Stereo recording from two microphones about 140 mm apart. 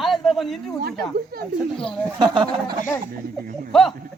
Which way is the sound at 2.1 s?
35° right (ahead or behind).